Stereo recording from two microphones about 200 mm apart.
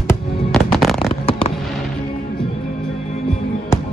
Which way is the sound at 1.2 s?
30° left (ahead or behind).